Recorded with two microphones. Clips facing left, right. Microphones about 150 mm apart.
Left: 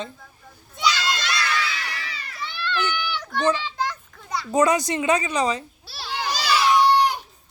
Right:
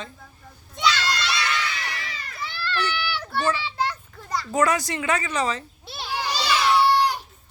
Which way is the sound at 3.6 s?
10° right (ahead or behind).